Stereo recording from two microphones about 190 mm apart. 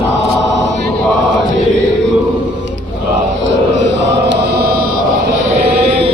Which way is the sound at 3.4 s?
70° right (ahead or behind).